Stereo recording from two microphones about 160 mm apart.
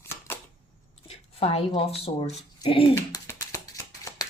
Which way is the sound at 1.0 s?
40° left (ahead or behind).